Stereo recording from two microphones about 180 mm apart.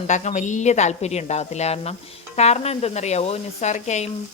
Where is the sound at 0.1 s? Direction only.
40° left (ahead or behind).